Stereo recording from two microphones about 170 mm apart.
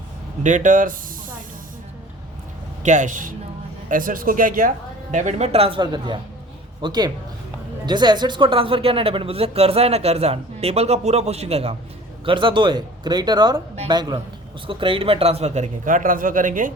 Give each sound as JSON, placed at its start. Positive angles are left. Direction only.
{"t": 0.4, "sound": "speech", "side_deg": -45}
{"t": 2.8, "sound": "speech", "side_deg": -45}
{"t": 5.1, "sound": "speech", "side_deg": -40}